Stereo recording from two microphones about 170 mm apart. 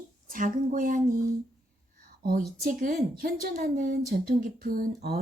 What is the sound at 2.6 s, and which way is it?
Speech, 55° right (ahead or behind).